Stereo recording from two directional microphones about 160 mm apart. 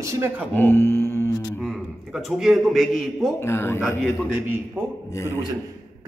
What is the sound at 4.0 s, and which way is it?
Speech, 10° right (ahead or behind).